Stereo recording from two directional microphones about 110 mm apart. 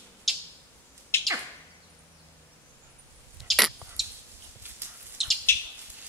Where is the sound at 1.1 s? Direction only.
20° left (ahead or behind).